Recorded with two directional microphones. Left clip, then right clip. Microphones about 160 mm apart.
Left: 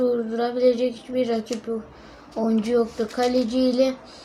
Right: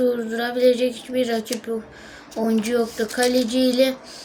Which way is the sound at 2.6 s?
10° right (ahead or behind).